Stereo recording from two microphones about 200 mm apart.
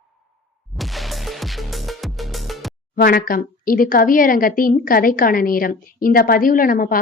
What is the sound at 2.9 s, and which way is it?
Speech, 45° left (ahead or behind).